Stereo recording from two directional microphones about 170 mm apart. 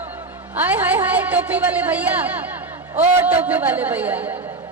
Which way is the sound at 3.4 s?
10° right (ahead or behind).